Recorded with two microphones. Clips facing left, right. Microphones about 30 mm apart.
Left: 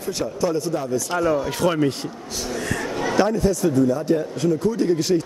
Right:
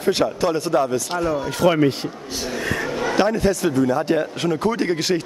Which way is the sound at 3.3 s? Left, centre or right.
Right.